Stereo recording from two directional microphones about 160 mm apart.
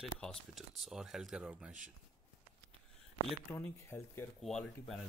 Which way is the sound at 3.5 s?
15° left (ahead or behind).